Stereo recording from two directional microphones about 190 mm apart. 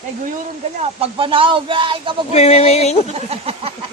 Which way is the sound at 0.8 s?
30° right (ahead or behind).